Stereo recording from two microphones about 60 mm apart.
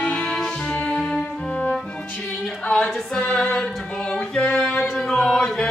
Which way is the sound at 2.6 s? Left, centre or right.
Centre.